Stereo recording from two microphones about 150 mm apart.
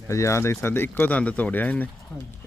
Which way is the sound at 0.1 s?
20° left (ahead or behind).